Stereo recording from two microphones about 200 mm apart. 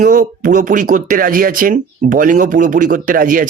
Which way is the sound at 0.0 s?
45° right (ahead or behind).